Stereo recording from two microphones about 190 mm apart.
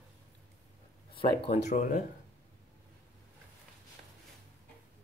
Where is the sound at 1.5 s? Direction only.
45° left (ahead or behind).